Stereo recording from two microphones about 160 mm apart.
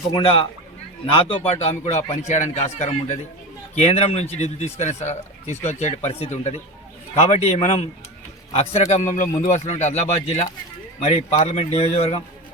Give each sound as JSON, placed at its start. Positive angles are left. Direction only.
{"t": 0.2, "sound": "a man's voice", "side_deg": 35}
{"t": 3.8, "sound": "a man's voice", "side_deg": 40}